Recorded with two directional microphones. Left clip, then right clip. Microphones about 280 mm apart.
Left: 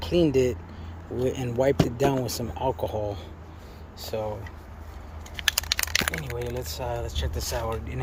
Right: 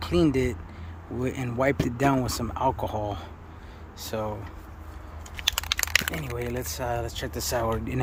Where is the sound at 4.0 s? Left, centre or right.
Centre.